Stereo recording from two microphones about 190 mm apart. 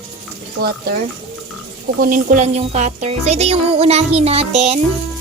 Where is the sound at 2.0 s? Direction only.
45° right (ahead or behind).